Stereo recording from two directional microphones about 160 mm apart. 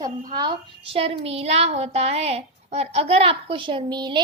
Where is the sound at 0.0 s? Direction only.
25° right (ahead or behind).